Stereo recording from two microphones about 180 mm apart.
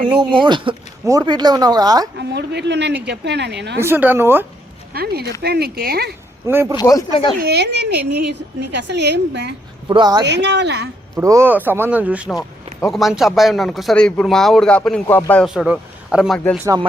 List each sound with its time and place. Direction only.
0.1 s speech: 25° right (ahead or behind)
2.1 s speech: 70° right (ahead or behind)
3.8 s speech: 10° right (ahead or behind)
4.9 s speech: 60° right (ahead or behind)
6.5 s speech: 15° right (ahead or behind)
6.7 s speech: 20° left (ahead or behind)
7.4 s speech: 65° right (ahead or behind)
9.9 s speech: 25° right (ahead or behind)
10.2 s speech: 75° right (ahead or behind)
11.2 s speech: 15° right (ahead or behind); by 15.4 s 10° left (ahead or behind)
15.4 s speech: 5° right (ahead or behind)